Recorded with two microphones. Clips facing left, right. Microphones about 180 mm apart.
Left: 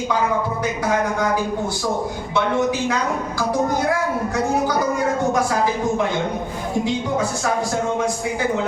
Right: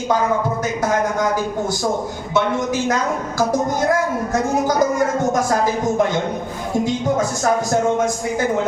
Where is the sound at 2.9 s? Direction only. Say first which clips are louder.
Right 2 dB; 45° right (ahead or behind).